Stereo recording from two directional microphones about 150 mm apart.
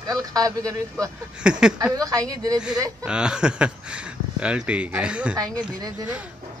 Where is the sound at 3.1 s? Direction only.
5° right (ahead or behind).